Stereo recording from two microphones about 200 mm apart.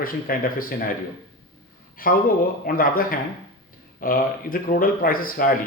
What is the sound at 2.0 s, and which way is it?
Speech, 45° left (ahead or behind).